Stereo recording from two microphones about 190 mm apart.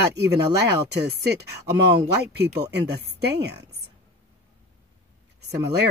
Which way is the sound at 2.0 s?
60° right (ahead or behind).